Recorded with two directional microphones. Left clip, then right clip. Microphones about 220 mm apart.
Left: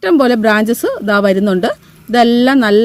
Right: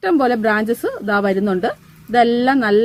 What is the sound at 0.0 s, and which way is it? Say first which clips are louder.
A woman's voice: left 5 dB; 40° left (ahead or behind).